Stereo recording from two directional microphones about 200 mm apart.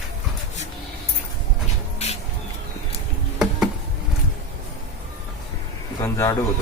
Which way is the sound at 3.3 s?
5° right (ahead or behind).